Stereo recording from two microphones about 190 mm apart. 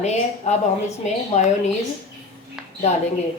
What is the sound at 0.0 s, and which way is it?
Speech, 35° left (ahead or behind).